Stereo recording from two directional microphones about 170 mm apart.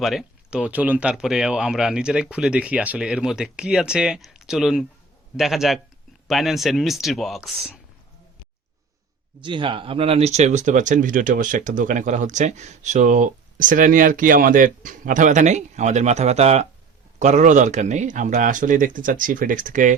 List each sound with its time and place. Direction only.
0.0 s speech: centre (ahead or behind)
9.4 s speech: 30° right (ahead or behind); by 19.9 s 50° right (ahead or behind)